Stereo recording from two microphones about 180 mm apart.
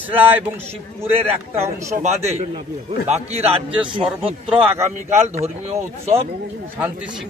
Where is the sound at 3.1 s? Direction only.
35° right (ahead or behind).